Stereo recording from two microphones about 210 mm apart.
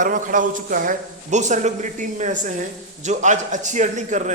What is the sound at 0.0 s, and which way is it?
A man's voice, 40° right (ahead or behind).